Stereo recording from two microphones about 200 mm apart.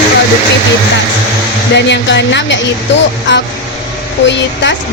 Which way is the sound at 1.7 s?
60° left (ahead or behind).